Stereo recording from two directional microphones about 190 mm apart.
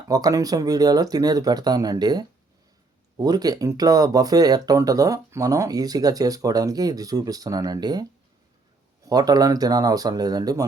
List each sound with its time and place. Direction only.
0.1 s speech: 20° right (ahead or behind)
9.0 s speech: 20° right (ahead or behind)